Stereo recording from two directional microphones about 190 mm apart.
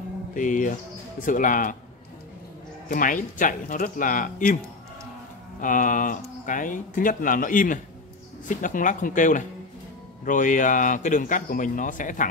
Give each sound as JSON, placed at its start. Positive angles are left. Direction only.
{"t": 0.3, "sound": "speech", "side_deg": 45}
{"t": 2.9, "sound": "speech", "side_deg": 45}
{"t": 5.6, "sound": "speech", "side_deg": 45}